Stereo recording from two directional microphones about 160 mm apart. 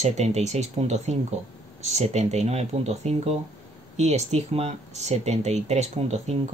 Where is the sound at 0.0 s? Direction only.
45° right (ahead or behind).